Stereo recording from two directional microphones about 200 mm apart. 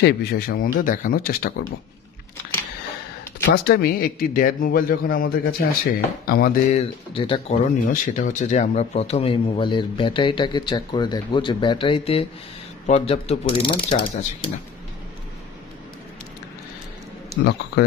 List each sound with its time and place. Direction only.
0.0 s speech: 55° left (ahead or behind)
3.6 s speech: 50° left (ahead or behind)
6.7 s speech: 30° left (ahead or behind)
7.8 s speech: 40° left (ahead or behind); by 14.5 s 25° left (ahead or behind)